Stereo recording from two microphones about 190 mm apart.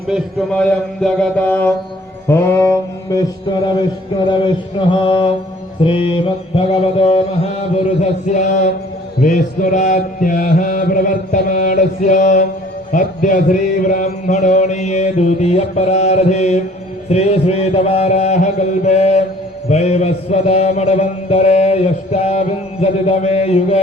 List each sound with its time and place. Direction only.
0.1 s speech: 5° left (ahead or behind)
2.2 s mantra: 15° left (ahead or behind); by 23.8 s 35° left (ahead or behind)